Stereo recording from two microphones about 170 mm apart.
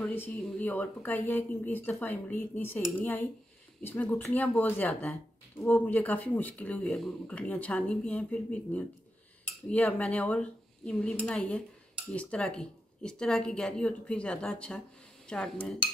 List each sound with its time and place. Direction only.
0.0 s speech: 10° left (ahead or behind)
9.4 s cutlery: 10° left (ahead or behind)
12.1 s speech: 5° left (ahead or behind)